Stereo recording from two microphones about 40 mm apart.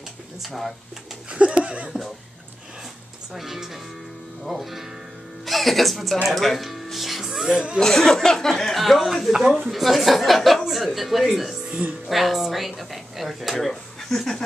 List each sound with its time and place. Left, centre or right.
0.5 s a woman's voice: centre
1.3 s speech: right
3.3 s a woman's voice: centre
7.5 s speech: right
7.8 s a woman's voice: centre